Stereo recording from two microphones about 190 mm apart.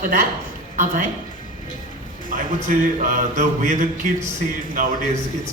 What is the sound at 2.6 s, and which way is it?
A woman's voice, 45° right (ahead or behind).